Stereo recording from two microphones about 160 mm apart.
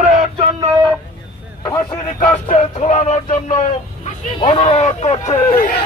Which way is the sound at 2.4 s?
50° left (ahead or behind).